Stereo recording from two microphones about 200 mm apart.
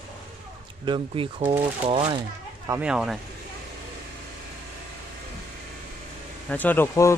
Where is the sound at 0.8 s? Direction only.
25° right (ahead or behind).